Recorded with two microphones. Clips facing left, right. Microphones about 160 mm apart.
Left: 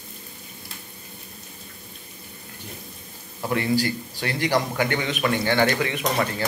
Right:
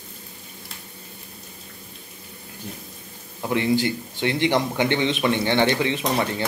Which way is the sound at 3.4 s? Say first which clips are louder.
Right 2 dB; 20° right (ahead or behind).